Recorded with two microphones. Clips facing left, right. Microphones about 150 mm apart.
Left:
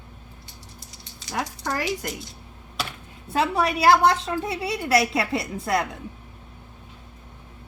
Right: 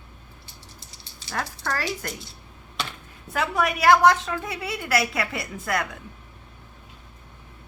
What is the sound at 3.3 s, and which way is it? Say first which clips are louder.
A woman's voice: left 2 dB; 30° left (ahead or behind).